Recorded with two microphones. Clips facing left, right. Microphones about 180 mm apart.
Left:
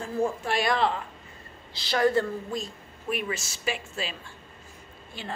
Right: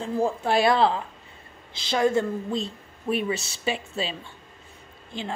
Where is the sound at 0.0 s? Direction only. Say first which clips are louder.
Right 3 dB; 30° right (ahead or behind).